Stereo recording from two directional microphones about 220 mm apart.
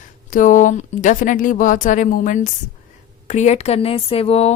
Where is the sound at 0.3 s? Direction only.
35° left (ahead or behind).